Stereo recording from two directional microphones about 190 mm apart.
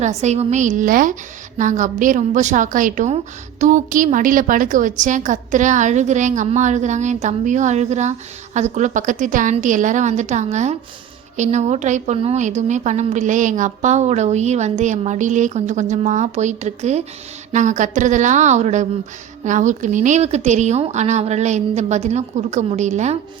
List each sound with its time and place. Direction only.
0.0 s a woman's voice: 35° right (ahead or behind)